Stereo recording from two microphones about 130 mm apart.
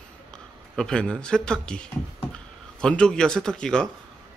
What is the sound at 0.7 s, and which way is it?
A man's voice, 5° left (ahead or behind).